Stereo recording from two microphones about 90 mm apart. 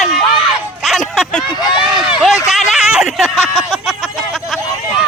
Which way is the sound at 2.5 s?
Centre (ahead or behind).